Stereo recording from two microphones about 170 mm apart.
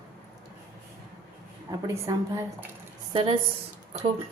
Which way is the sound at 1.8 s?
20° right (ahead or behind).